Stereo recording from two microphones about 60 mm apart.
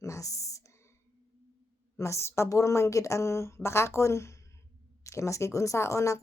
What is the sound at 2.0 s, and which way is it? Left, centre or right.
A woman's voice, left.